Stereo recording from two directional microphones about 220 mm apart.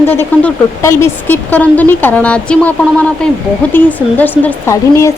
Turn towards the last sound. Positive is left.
turn(degrees=15)  # may be behind; listen again after turning